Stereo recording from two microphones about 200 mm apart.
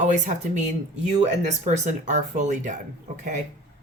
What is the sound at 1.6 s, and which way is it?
A woman's voice, 35° right (ahead or behind).